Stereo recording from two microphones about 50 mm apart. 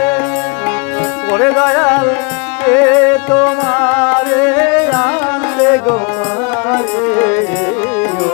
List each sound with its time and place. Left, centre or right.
1.3 s music: left
7.2 s music: left